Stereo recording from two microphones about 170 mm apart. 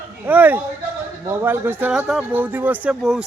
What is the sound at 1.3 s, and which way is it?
Speech, 10° right (ahead or behind).